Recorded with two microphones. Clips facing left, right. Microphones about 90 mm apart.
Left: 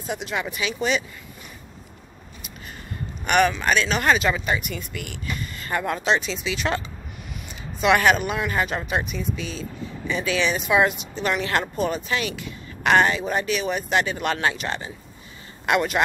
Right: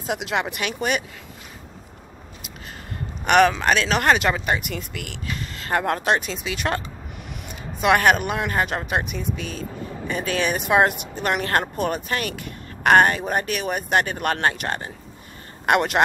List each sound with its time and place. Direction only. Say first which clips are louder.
0.0 s speech: right 3 dB; 85° right; by 1.0 s 55° right (ahead or behind)
3.3 s speech: right 3 dB; 90° right; by 6.8 s 50° right (ahead or behind)
7.8 s speech: right 1 dB; 50° right (ahead or behind)